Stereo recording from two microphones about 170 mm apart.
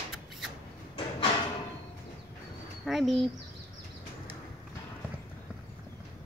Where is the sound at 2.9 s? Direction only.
Centre (ahead or behind).